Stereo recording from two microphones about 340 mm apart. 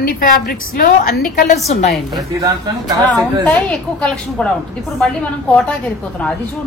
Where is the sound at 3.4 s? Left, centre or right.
Centre.